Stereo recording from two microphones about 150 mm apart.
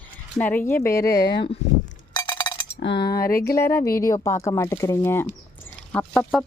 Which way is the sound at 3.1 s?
85° left.